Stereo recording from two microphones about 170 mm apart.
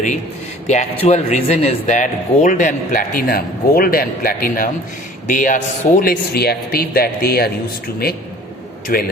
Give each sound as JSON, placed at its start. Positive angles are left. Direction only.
{"t": 0.7, "sound": "a man's voice", "side_deg": 40}
{"t": 6.0, "sound": "a man's voice", "side_deg": 65}
{"t": 8.9, "sound": "a man's voice", "side_deg": 55}